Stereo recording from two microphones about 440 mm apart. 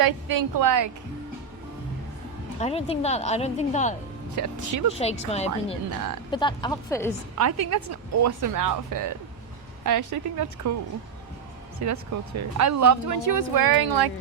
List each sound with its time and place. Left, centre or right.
0.0 s speech: right
2.6 s a woman's voice: centre
4.4 s a woman's voice: right
4.9 s a woman's voice: centre
7.3 s a woman's voice: right
11.8 s speech: right